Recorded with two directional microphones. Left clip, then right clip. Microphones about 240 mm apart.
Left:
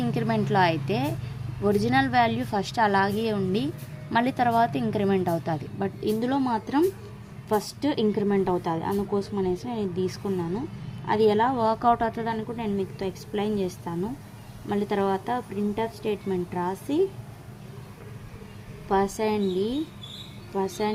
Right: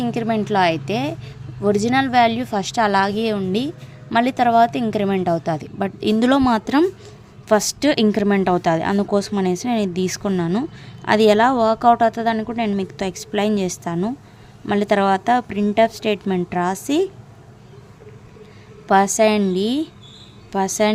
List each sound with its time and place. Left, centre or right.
0.0 s a woman's voice: centre
18.9 s a woman's voice: right